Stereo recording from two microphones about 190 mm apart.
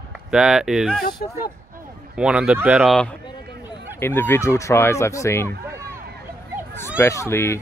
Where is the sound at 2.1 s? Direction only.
5° right (ahead or behind).